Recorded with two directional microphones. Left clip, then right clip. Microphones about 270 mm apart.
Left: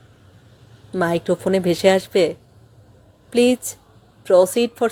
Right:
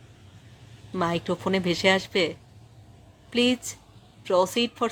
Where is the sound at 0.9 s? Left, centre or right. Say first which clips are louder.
Left 7 dB; centre.